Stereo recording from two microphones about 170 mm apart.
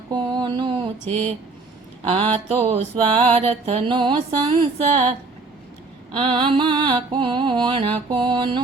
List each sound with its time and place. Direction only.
0.1 s mantra: 25° right (ahead or behind)
2.0 s mantra: 35° right (ahead or behind)
6.1 s music: 30° right (ahead or behind)